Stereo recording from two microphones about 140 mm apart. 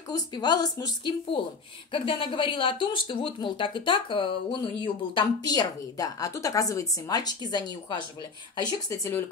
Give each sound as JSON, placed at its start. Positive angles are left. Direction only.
{"t": 0.1, "sound": "speech", "side_deg": 30}